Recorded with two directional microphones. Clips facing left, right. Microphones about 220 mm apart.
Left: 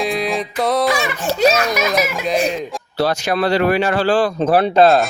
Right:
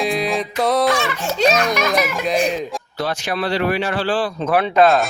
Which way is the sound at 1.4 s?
5° left (ahead or behind).